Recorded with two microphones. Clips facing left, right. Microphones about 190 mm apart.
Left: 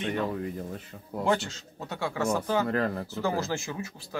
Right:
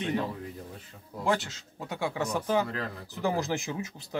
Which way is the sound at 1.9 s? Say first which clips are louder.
Left 3 dB; 15° right (ahead or behind).